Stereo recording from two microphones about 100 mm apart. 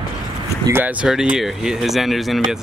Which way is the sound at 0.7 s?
15° right (ahead or behind).